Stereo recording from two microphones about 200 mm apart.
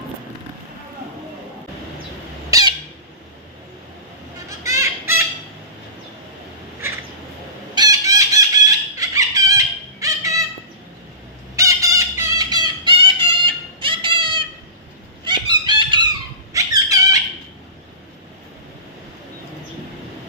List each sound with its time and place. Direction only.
2.5 s squawk: 20° right (ahead or behind)
4.6 s fowl: 15° right (ahead or behind)
7.8 s chicken: 15° right (ahead or behind)
11.5 s fowl: 15° right (ahead or behind)
15.2 s a sound: 20° right (ahead or behind)
16.5 s squeak: 15° right (ahead or behind)